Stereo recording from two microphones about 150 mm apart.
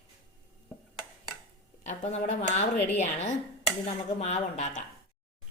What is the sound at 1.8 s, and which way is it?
Speech, 45° left (ahead or behind).